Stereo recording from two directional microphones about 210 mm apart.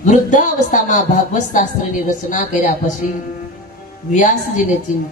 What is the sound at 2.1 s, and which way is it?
Speech, 35° left (ahead or behind).